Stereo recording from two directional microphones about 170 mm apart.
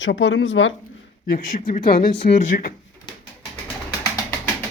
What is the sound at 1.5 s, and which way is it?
Speech, 50° left (ahead or behind).